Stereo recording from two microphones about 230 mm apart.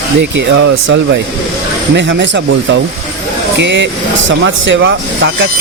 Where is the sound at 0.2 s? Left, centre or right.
Right.